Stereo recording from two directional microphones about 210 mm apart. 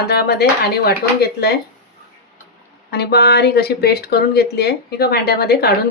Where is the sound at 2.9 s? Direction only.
50° left (ahead or behind).